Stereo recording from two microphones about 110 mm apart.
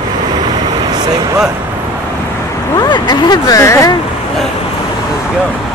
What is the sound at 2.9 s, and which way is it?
Speech, 40° left (ahead or behind).